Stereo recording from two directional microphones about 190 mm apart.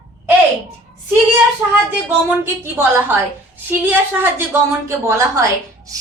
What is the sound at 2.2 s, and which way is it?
A woman's voice, 10° right (ahead or behind).